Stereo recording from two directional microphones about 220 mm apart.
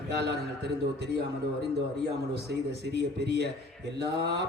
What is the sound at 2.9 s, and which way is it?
A man's voice, 50° right (ahead or behind).